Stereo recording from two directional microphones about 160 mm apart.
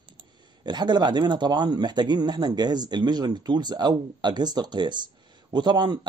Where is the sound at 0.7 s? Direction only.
25° right (ahead or behind).